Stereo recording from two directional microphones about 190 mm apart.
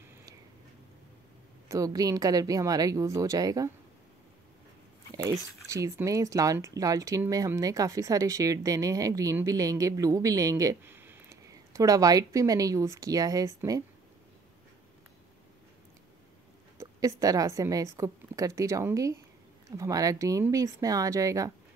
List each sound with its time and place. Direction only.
1.7 s a woman's voice: 20° right (ahead or behind)
5.1 s speech: 15° right (ahead or behind)
16.7 s speech: 15° right (ahead or behind)